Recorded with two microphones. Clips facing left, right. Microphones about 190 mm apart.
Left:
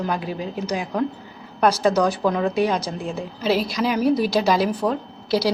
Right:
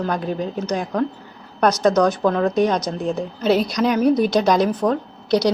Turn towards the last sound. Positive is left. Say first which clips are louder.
# right 3 dB
turn(degrees=5)  # may be behind; listen again after turning